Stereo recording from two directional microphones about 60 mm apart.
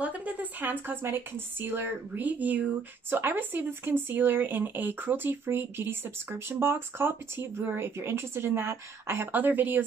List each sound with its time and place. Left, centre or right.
0.0 s speech: right
9.3 s speech: right